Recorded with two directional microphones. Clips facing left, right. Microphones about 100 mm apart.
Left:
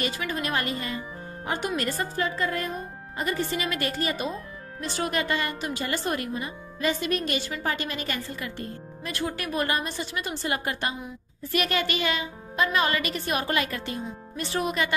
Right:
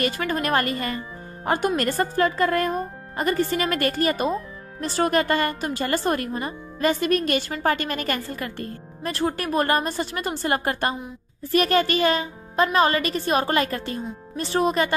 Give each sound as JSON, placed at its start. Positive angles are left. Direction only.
{"t": 0.0, "sound": "speech", "side_deg": -50}
{"t": 9.1, "sound": "a woman's voice", "side_deg": -40}